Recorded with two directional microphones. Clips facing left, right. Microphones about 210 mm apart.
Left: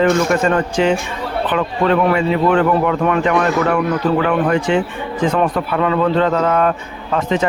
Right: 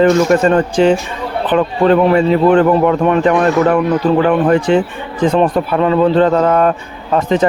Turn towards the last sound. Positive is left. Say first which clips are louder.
# right 4 dB
turn(degrees=-35)  # may be behind; listen again after turning